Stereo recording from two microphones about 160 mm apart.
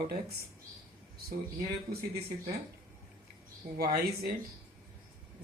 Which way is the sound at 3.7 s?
75° right (ahead or behind).